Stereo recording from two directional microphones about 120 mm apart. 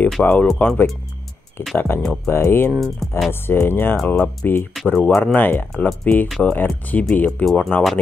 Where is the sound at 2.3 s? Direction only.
20° left (ahead or behind).